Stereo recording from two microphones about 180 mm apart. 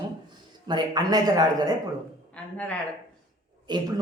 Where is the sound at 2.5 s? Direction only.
5° left (ahead or behind).